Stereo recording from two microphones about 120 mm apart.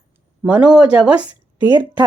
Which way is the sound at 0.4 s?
10° right (ahead or behind).